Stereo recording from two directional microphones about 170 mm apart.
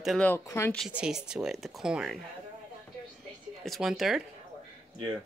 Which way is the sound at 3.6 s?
Centre (ahead or behind).